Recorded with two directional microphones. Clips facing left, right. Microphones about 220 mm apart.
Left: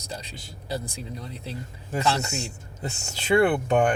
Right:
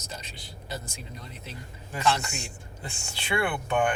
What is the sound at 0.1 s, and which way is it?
A man's voice, 40° left (ahead or behind).